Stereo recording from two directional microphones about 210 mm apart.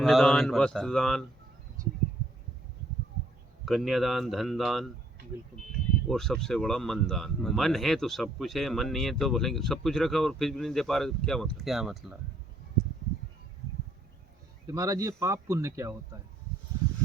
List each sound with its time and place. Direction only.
0.0 s speech: centre (ahead or behind)
3.7 s speech: centre (ahead or behind)
6.1 s speech: centre (ahead or behind)
14.7 s speech: 15° right (ahead or behind)